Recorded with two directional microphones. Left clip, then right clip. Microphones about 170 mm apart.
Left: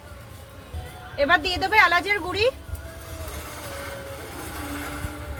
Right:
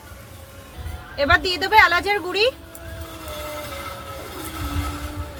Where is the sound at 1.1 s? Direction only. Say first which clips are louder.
Right 2 dB; 15° right (ahead or behind).